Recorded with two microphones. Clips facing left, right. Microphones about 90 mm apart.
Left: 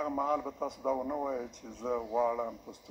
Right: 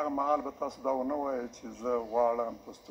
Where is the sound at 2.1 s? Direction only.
30° right (ahead or behind).